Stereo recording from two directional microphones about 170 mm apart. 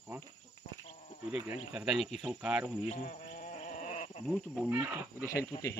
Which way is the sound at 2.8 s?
45° left (ahead or behind).